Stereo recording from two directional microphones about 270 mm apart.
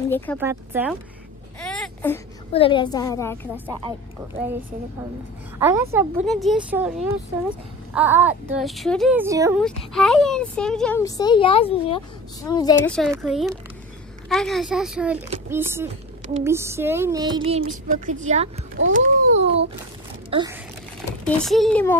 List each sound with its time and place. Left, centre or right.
0.4 s speech: centre
1.6 s a sound: centre
2.5 s a woman's voice: centre
5.6 s speech: centre
9.6 s a woman's voice: centre
13.1 s speech: centre; by 18.7 s right
18.9 s a sound: right
20.2 s speech: centre
21.3 s speech: centre